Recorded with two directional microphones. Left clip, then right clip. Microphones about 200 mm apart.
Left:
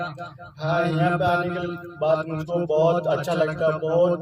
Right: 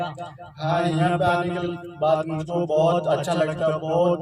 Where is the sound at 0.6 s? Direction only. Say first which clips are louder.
Even; 20° right (ahead or behind).